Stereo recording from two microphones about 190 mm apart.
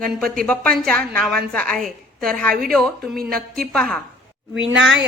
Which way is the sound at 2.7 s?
Centre (ahead or behind).